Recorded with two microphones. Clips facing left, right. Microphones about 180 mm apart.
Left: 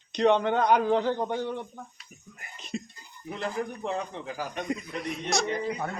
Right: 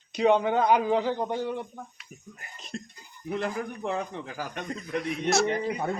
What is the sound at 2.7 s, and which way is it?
Speech, 5° left (ahead or behind).